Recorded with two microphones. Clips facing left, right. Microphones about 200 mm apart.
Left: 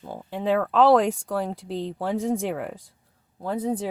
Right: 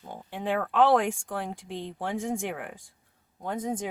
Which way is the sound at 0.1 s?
40° left (ahead or behind).